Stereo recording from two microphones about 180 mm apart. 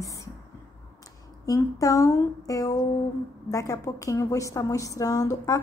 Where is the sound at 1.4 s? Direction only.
20° left (ahead or behind).